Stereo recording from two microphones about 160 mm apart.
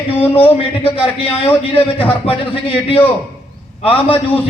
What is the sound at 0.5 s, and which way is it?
Speech, 35° left (ahead or behind).